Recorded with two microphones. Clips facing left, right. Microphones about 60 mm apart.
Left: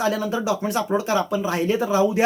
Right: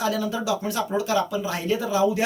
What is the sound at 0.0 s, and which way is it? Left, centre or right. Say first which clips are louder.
Speech: left 2 dB; left.